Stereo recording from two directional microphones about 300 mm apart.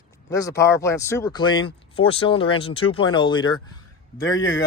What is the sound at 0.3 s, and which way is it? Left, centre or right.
Speech, centre.